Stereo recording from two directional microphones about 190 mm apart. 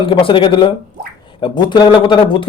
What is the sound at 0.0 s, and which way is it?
Speech, 25° left (ahead or behind).